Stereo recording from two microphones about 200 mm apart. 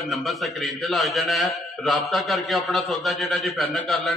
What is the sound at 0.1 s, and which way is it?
A man's voice, centre (ahead or behind).